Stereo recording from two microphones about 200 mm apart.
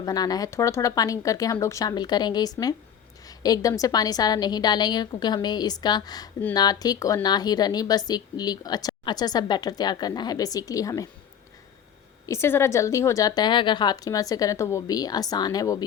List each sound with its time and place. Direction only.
0.0 s a woman's voice: 20° left (ahead or behind)
12.2 s speech: 15° left (ahead or behind)